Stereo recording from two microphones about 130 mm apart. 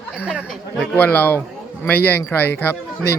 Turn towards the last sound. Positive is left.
turn(degrees=15)  # may be behind; listen again after turning